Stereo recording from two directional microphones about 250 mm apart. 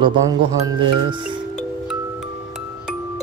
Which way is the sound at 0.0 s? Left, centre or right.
Centre.